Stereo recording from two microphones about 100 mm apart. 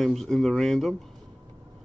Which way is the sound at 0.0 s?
5° left (ahead or behind).